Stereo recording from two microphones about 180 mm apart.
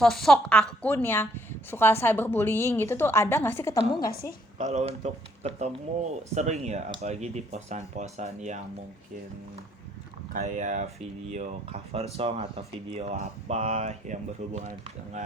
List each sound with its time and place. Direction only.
0.0 s a woman's voice: 5° left (ahead or behind)
4.1 s a woman's voice: 55° left (ahead or behind)
4.5 s speech: 40° right (ahead or behind)
10.3 s speech: 45° right (ahead or behind)